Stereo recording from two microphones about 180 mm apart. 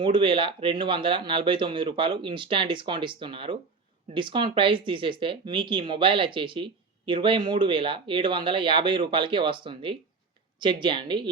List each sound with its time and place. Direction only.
0.0 s speech: 25° right (ahead or behind)